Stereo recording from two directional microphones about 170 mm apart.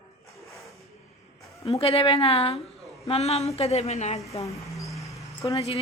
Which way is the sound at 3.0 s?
40° left (ahead or behind).